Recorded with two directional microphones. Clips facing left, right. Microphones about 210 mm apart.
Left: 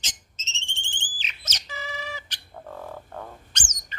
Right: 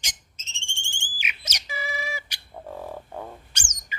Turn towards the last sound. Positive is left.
turn(degrees=-10)  # may be behind; listen again after turning